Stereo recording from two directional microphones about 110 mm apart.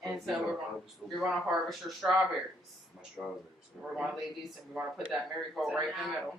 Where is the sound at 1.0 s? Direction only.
Centre (ahead or behind).